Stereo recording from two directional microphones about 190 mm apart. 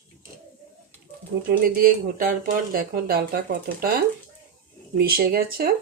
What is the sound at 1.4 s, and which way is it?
Speech, 50° right (ahead or behind).